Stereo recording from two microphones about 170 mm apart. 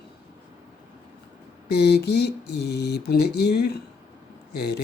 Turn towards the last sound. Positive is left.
turn(degrees=70)  # may be behind; listen again after turning